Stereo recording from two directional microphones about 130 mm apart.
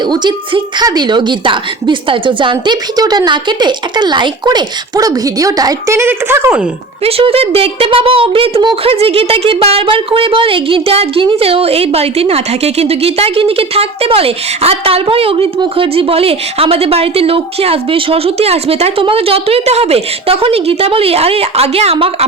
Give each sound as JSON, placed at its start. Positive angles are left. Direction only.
{"t": 0.0, "sound": "a woman's voice", "side_deg": -35}
{"t": 7.0, "sound": "a woman's voice", "side_deg": -45}